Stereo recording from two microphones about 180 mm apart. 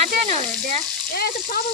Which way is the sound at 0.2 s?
35° right (ahead or behind).